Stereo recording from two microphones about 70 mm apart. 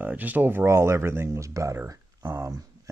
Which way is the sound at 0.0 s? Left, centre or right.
Right.